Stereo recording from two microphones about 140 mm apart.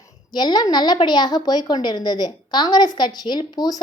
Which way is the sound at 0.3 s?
30° left (ahead or behind).